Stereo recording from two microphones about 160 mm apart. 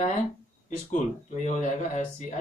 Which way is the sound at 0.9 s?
50° left (ahead or behind).